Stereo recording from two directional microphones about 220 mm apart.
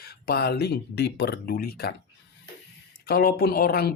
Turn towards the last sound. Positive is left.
turn(degrees=45)  # may be behind; listen again after turning